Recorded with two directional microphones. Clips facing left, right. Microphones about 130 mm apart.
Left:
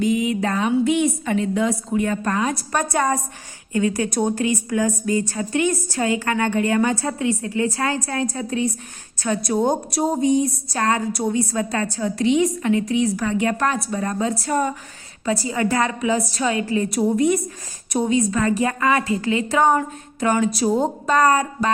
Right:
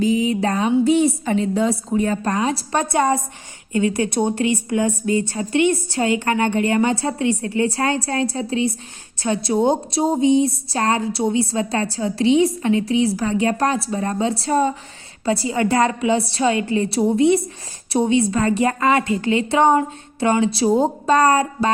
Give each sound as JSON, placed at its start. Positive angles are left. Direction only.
{"t": 0.0, "sound": "a woman's voice", "side_deg": -35}
{"t": 20.7, "sound": "speech", "side_deg": -5}
{"t": 21.1, "sound": "a woman's voice", "side_deg": -30}